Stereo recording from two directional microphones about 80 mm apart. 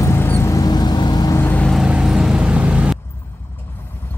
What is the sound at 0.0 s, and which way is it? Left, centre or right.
Vehicle, left.